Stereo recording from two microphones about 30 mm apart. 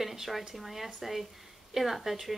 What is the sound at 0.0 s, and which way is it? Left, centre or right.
A woman's voice, centre.